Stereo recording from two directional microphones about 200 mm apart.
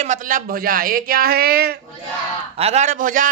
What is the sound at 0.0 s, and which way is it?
Speech, 40° right (ahead or behind).